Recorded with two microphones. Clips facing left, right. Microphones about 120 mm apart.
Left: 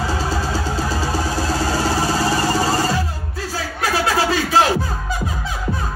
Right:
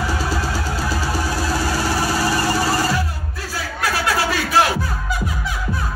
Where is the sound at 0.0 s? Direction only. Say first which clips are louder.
Left 1 dB; 25° left (ahead or behind).